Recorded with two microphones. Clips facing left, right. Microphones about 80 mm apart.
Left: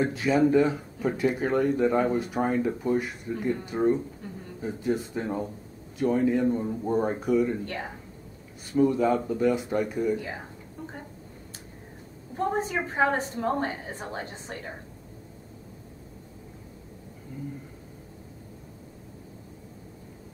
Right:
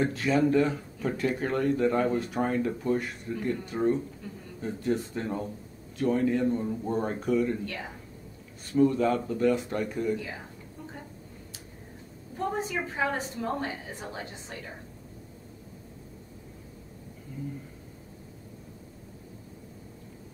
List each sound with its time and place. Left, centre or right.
0.0 s speech: centre
7.6 s a woman's voice: left
8.7 s speech: centre
10.1 s a woman's voice: left
12.4 s a woman's voice: left